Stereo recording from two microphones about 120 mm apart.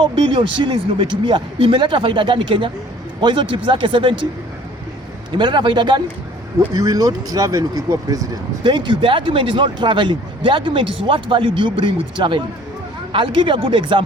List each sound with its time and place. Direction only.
0.0 s speech: 45° right (ahead or behind)
5.3 s a man's voice: 40° right (ahead or behind)
6.7 s speech: 30° right (ahead or behind)